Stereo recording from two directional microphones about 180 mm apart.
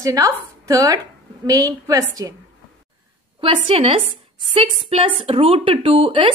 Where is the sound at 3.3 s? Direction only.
30° right (ahead or behind).